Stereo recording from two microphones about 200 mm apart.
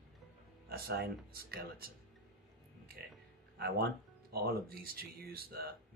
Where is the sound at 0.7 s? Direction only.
50° right (ahead or behind).